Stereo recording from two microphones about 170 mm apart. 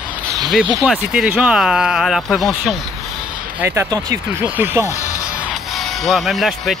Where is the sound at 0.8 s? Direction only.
5° right (ahead or behind).